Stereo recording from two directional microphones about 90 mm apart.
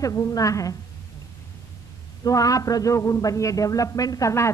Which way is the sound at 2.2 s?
40° left (ahead or behind).